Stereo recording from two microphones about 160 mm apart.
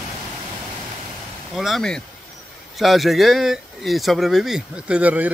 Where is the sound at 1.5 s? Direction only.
Centre (ahead or behind).